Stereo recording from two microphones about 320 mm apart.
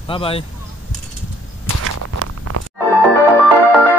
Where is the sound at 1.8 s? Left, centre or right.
Right.